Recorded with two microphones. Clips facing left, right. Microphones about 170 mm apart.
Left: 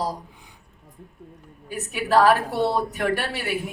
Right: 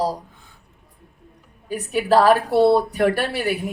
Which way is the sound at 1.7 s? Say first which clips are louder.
Right 6 dB; 40° right (ahead or behind).